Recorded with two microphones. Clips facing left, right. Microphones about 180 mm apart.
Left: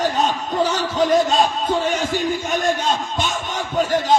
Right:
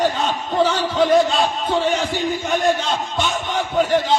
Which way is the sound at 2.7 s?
45° left (ahead or behind).